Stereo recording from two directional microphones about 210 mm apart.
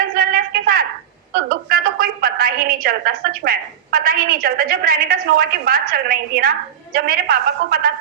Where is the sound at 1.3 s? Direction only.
45° right (ahead or behind).